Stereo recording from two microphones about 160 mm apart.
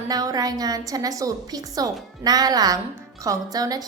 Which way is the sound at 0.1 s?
25° right (ahead or behind).